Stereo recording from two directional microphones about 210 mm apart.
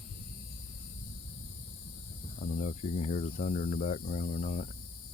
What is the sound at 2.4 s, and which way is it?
Speech, 35° left (ahead or behind).